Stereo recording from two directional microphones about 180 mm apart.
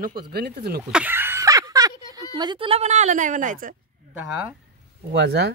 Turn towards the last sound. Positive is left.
turn(degrees=-70)  # may be behind; listen again after turning